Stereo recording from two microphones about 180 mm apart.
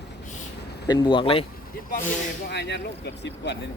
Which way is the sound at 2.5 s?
70° left (ahead or behind).